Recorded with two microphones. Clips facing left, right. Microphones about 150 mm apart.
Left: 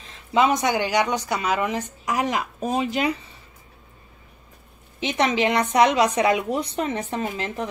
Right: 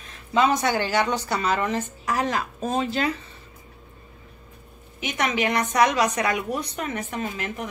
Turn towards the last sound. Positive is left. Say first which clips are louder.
# left 3 dB
turn(degrees=30)  # may be behind; listen again after turning